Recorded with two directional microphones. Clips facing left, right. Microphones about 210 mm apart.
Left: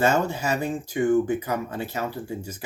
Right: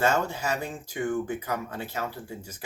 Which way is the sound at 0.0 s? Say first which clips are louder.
Left 3 dB; 10° left (ahead or behind).